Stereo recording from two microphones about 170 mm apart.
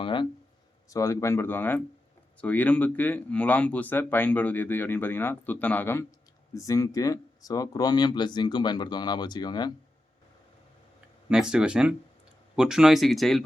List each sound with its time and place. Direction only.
0.0 s a sound: 30° left (ahead or behind)
0.9 s speech: 20° left (ahead or behind)
11.3 s speech: 5° right (ahead or behind)